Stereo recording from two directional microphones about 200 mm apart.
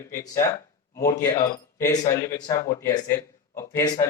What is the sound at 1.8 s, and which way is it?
Speech, 15° left (ahead or behind).